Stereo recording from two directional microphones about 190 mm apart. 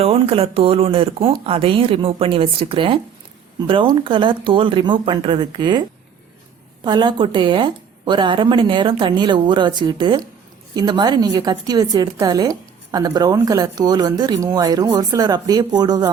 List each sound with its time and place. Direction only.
0.0 s a woman's voice: 30° right (ahead or behind)
6.8 s a woman's voice: 25° right (ahead or behind)